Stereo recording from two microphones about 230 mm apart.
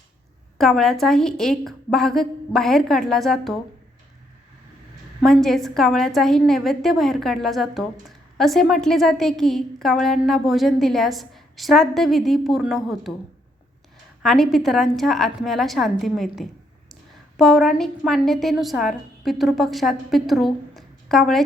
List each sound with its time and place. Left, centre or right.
0.6 s a woman's voice: centre
5.2 s a woman's voice: centre
14.2 s a woman's voice: centre